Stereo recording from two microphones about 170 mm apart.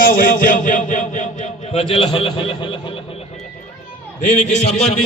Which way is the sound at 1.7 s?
30° left (ahead or behind).